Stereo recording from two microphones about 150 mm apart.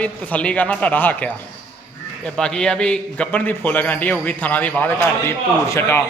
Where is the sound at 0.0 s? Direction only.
10° left (ahead or behind).